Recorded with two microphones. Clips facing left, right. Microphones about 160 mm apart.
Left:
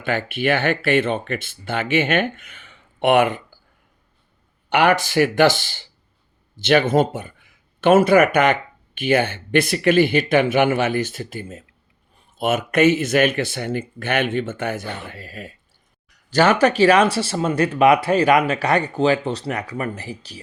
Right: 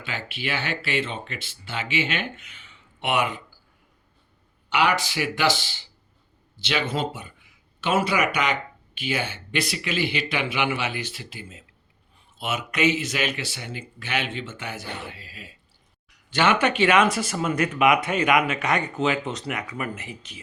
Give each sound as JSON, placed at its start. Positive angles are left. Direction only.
{"t": 0.0, "sound": "speech", "side_deg": 55}
{"t": 4.7, "sound": "speech", "side_deg": 50}